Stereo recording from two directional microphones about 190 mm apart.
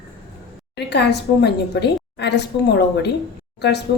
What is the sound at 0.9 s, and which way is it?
A woman's voice, 60° left (ahead or behind).